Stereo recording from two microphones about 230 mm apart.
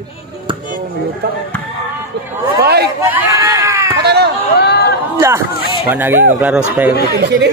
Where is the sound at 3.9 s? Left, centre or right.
Right.